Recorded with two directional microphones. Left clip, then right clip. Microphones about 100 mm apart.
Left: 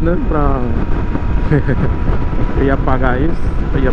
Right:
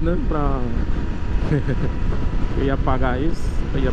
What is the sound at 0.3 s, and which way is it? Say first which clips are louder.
Speech: left 7 dB; 10° right (ahead or behind).